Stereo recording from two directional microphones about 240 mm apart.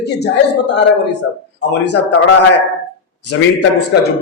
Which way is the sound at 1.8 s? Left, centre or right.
Left.